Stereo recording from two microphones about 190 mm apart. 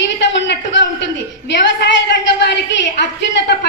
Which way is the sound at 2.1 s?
65° left (ahead or behind).